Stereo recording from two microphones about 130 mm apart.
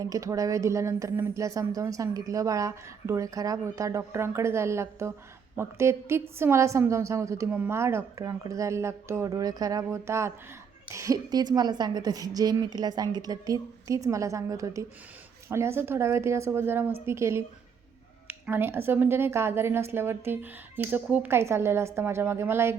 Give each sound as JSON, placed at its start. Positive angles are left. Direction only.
{"t": 0.0, "sound": "speech", "side_deg": -25}